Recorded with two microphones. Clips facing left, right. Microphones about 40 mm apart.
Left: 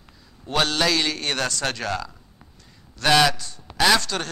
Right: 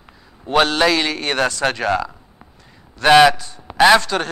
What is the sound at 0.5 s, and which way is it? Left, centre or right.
A man's voice, centre.